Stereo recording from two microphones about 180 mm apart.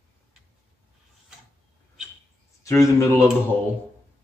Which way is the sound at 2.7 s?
15° left (ahead or behind).